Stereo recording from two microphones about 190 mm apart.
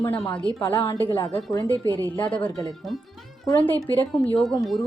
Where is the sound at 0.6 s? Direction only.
15° left (ahead or behind).